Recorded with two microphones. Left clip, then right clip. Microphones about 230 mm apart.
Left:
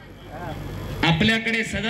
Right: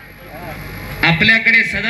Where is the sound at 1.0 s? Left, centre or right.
Left.